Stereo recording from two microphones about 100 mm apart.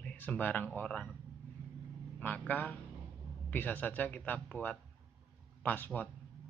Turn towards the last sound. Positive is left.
turn(degrees=15)  # may be behind; listen again after turning